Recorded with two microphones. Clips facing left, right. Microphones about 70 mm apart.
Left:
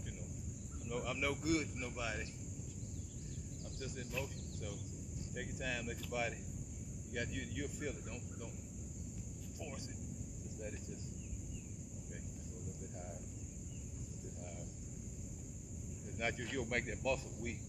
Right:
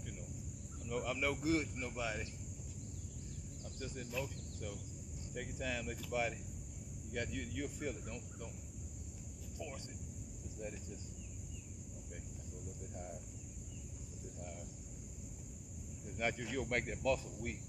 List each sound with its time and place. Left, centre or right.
0.8 s speech: centre
1.4 s speech: right
2.0 s speech: centre
3.8 s speech: centre
16.2 s speech: centre